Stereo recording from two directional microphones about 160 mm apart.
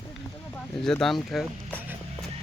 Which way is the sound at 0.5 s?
5° left (ahead or behind).